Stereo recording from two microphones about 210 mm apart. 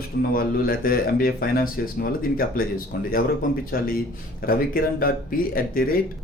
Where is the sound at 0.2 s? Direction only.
45° left (ahead or behind).